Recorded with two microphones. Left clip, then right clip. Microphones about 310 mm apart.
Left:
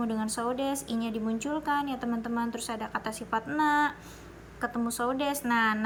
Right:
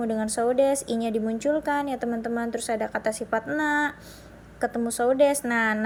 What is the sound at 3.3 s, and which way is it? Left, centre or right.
Speech, right.